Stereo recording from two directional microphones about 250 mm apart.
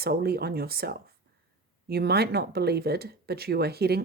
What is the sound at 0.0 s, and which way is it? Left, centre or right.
Speech, right.